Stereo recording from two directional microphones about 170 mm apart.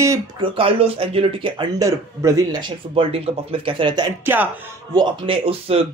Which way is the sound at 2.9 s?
35° right (ahead or behind).